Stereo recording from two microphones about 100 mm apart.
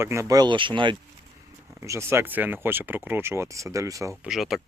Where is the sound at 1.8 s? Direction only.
30° right (ahead or behind).